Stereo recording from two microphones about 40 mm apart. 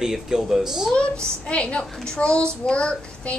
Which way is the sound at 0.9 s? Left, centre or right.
Left.